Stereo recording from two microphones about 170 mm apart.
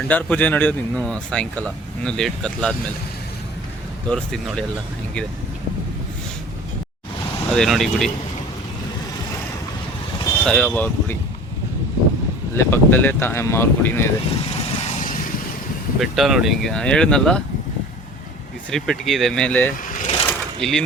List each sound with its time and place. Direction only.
0.1 s speech: 10° left (ahead or behind)
4.1 s speech: 5° left (ahead or behind)
7.5 s speech: centre (ahead or behind)
10.4 s speech: 5° left (ahead or behind)
12.5 s speech: 10° left (ahead or behind)
14.5 s vehicle: 35° left (ahead or behind)
16.0 s speech: centre (ahead or behind)
18.7 s speech: centre (ahead or behind)
19.9 s vehicle: 45° left (ahead or behind)
20.2 s sewing machine: 5° left (ahead or behind)